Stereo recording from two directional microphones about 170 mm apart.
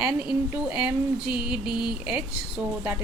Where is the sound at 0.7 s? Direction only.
5° right (ahead or behind).